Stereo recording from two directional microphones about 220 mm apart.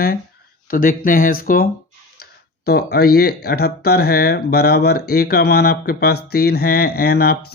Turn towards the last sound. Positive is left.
turn(degrees=45)  # may be behind; listen again after turning